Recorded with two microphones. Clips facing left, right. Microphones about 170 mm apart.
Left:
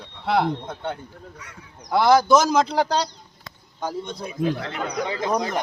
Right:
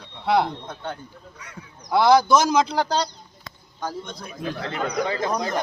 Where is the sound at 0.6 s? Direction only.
25° left (ahead or behind).